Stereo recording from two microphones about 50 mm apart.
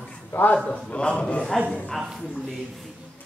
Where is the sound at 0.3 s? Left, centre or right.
Left.